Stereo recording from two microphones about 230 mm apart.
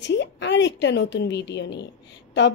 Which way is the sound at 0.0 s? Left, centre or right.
Left.